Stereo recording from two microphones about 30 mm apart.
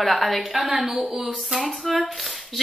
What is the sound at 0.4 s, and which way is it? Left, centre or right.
Speech, centre.